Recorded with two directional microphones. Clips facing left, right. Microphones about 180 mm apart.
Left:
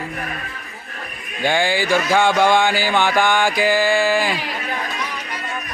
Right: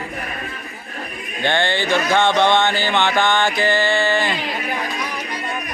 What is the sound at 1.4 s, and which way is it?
Speech, 10° left (ahead or behind).